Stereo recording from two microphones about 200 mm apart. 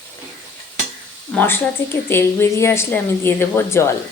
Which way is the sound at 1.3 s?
10° left (ahead or behind).